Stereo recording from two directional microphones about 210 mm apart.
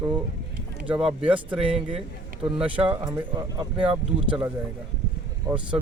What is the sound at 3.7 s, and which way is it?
Speech, 5° right (ahead or behind).